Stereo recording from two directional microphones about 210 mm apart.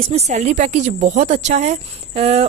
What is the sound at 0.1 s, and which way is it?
A woman's voice, 30° right (ahead or behind).